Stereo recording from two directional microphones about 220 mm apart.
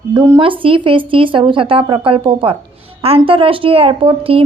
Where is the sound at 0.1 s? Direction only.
20° right (ahead or behind).